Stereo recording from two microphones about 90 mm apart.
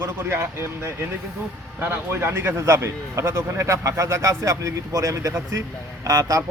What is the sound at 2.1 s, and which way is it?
A man's voice, 25° right (ahead or behind).